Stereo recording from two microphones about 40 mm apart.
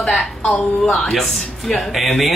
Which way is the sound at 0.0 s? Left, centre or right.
Centre.